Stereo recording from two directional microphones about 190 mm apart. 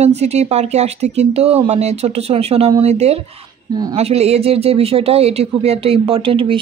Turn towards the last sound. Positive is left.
turn(degrees=-30)  # may be behind; listen again after turning